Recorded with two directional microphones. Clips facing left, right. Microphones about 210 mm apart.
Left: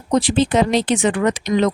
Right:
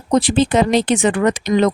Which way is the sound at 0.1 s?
55° right (ahead or behind).